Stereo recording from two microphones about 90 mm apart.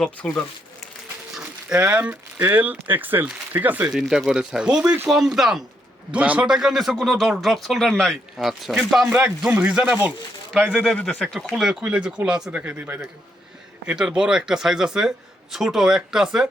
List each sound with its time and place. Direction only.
0.0 s speech: 15° left (ahead or behind)
1.4 s speech: 10° right (ahead or behind)
3.9 s speech: 5° right (ahead or behind)
6.1 s a man's voice: 15° right (ahead or behind)
9.4 s speech: 15° right (ahead or behind)
11.0 s a man's voice: 5° left (ahead or behind)
11.8 s speech: 15° right (ahead or behind)